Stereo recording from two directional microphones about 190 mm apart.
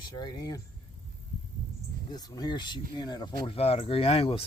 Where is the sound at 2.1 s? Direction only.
20° left (ahead or behind).